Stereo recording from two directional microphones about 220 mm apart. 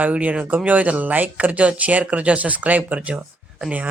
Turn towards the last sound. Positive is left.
turn(degrees=-5)  # may be behind; listen again after turning